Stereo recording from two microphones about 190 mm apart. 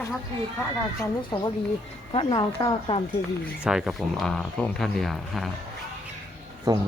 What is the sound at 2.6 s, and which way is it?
Speech, 25° left (ahead or behind).